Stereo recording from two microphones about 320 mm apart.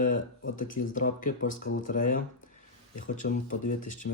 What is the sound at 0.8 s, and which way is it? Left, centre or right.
Speech, left.